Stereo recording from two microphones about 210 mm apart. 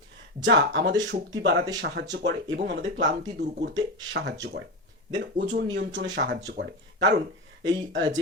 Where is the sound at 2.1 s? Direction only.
55° right (ahead or behind).